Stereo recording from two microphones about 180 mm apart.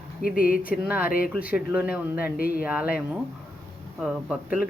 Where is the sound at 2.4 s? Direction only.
55° left (ahead or behind).